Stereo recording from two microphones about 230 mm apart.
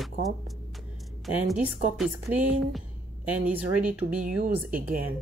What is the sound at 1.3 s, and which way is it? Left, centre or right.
A woman's voice, centre.